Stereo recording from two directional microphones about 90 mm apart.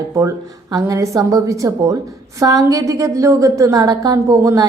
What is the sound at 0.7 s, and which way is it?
A woman's voice, 35° right (ahead or behind).